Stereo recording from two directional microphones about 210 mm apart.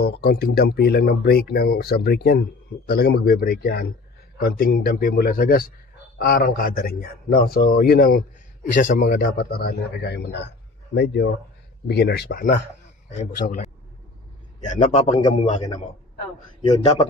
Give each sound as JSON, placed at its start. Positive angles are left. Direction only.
{"t": 0.0, "sound": "speech", "side_deg": 50}
{"t": 13.4, "sound": "a man's voice", "side_deg": 35}
{"t": 14.6, "sound": "a man's voice", "side_deg": 35}